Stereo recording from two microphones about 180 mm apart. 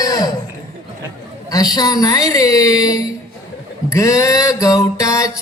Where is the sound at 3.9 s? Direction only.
20° left (ahead or behind).